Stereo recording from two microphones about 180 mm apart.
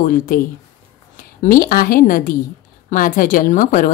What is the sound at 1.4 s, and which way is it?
A woman's voice, 50° left (ahead or behind).